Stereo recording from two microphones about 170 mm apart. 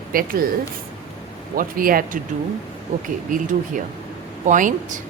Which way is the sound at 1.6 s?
55° right (ahead or behind).